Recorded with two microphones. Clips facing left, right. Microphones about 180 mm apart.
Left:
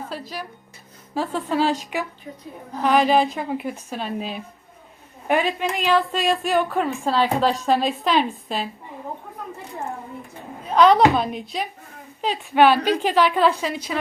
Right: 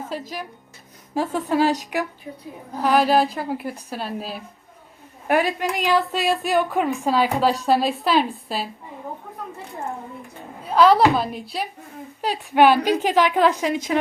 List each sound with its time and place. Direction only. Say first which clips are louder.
0.1 s a woman's voice: right 2 dB; 15° right (ahead or behind)
2.8 s a woman's voice: even; 5° right (ahead or behind)
5.4 s a woman's voice: right 1 dB; 10° right (ahead or behind)
10.7 s a woman's voice: even; 5° right (ahead or behind)
12.2 s a woman's voice: even; 10° right (ahead or behind)